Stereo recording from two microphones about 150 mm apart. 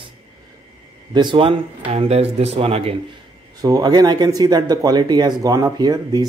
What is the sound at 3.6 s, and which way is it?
Speech, 25° right (ahead or behind).